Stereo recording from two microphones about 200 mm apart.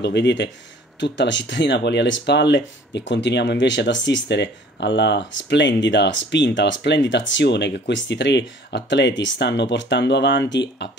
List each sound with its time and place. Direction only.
0.0 s speech: 60° left (ahead or behind)